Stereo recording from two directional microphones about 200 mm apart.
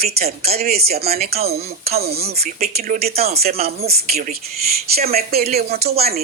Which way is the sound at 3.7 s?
50° right (ahead or behind).